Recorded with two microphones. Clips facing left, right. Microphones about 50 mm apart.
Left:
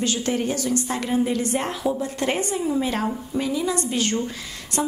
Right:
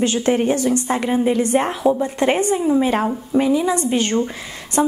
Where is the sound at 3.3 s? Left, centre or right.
Right.